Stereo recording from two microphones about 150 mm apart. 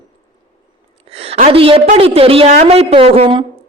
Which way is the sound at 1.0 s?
40° right (ahead or behind).